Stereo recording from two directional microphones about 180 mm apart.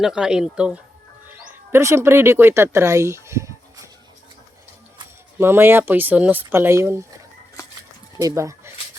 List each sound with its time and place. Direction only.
0.0 s speech: 5° right (ahead or behind)
5.4 s speech: 15° right (ahead or behind)
8.2 s speech: 15° right (ahead or behind)